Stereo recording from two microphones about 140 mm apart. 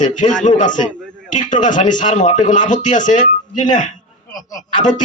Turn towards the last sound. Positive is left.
turn(degrees=65)  # may be behind; listen again after turning